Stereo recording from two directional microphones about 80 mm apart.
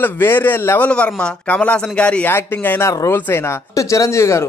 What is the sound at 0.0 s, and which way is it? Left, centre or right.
Speech, left.